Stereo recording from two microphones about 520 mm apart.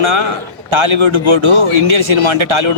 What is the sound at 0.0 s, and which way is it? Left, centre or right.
A man's voice, right.